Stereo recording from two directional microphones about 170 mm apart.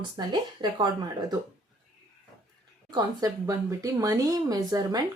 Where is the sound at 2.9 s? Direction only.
20° right (ahead or behind).